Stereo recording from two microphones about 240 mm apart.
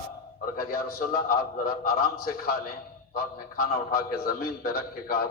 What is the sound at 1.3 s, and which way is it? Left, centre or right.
A man's voice, left.